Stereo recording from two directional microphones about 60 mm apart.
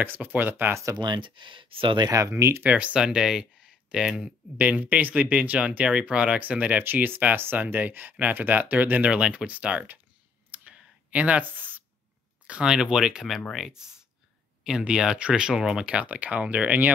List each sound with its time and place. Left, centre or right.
0.0 s speech: right
2.0 s speech: right
2.7 s speech: centre
4.6 s speech: right
6.8 s speech: right
10.5 s clicking: right
12.6 s speech: centre